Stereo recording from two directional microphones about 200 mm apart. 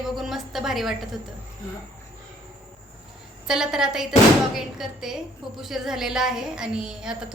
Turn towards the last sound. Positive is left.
turn(degrees=-5)  # may be behind; listen again after turning